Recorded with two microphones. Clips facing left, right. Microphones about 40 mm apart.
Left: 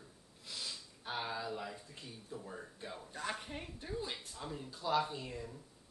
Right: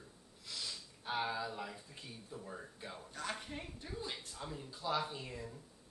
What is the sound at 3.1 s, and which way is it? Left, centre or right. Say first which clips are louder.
A woman's voice: left 1 dB; centre.